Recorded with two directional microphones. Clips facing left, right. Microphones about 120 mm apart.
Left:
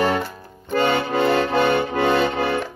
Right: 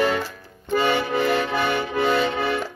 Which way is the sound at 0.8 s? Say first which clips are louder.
Left 3 dB; 25° left (ahead or behind).